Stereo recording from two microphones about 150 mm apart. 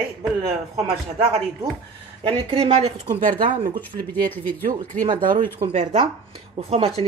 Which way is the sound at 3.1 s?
65° right (ahead or behind).